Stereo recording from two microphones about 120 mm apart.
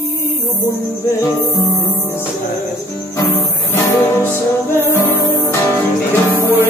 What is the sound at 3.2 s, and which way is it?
Music, 20° left (ahead or behind).